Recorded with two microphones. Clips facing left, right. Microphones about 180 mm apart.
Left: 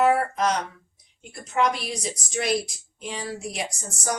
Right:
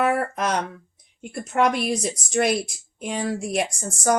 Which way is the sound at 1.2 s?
55° right (ahead or behind).